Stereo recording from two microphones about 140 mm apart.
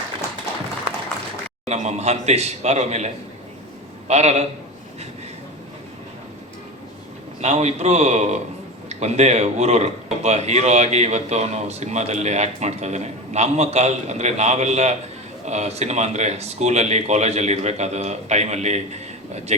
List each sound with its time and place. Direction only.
1.6 s a man's voice: 55° right (ahead or behind)
4.1 s a man's voice: 50° right (ahead or behind)
7.4 s a man's voice: 50° right (ahead or behind)